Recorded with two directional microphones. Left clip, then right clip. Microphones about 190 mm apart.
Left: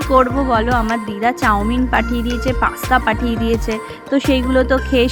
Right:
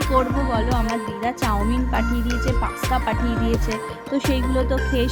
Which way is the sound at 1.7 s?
15° left (ahead or behind).